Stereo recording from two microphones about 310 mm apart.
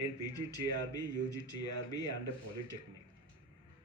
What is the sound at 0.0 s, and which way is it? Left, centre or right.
Speech, centre.